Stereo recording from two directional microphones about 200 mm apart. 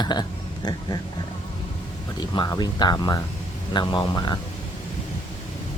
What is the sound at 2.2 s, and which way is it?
Speech, 20° left (ahead or behind).